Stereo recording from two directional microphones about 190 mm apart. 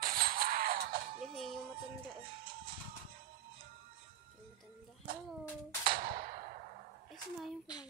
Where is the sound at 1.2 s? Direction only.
Centre (ahead or behind).